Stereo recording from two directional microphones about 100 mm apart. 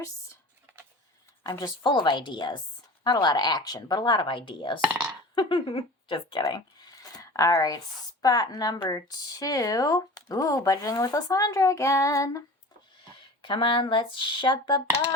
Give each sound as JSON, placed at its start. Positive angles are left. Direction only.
{"t": 1.5, "sound": "a woman's voice", "side_deg": 40}
{"t": 4.9, "sound": "speech", "side_deg": -15}
{"t": 5.3, "sound": "speech", "side_deg": 55}
{"t": 6.4, "sound": "a sound", "side_deg": 45}
{"t": 8.2, "sound": "speech", "side_deg": 40}
{"t": 13.1, "sound": "speech", "side_deg": 55}